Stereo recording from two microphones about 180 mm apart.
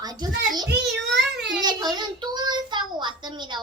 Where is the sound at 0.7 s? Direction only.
70° right (ahead or behind).